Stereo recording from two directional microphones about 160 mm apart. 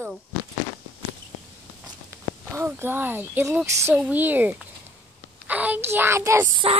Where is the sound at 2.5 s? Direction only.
15° right (ahead or behind).